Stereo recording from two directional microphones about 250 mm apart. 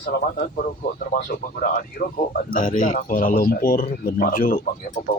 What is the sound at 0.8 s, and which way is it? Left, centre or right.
Speech, left.